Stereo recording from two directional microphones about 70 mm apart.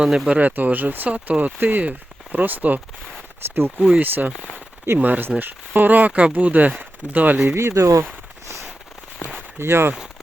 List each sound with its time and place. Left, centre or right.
0.3 s speech: right
3.4 s speech: right
3.8 s speech: centre
7.4 s speech: right
9.6 s speech: right